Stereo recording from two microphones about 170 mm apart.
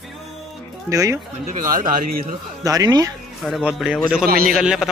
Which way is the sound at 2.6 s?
20° right (ahead or behind).